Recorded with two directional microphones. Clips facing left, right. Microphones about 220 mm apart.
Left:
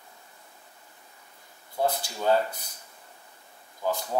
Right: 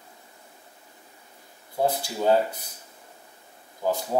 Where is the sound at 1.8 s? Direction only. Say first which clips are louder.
Right 3 dB; 15° right (ahead or behind).